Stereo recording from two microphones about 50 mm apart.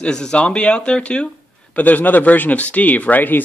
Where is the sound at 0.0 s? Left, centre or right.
Centre.